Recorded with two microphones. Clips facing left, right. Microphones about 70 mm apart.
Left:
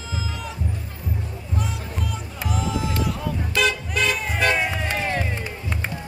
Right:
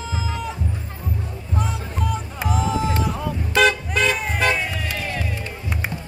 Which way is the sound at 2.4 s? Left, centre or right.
Right.